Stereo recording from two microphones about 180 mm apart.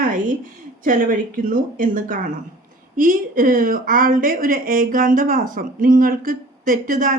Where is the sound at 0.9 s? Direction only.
50° right (ahead or behind).